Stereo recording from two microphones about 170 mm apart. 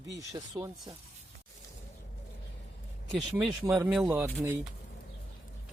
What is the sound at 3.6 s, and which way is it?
Speech, 10° right (ahead or behind).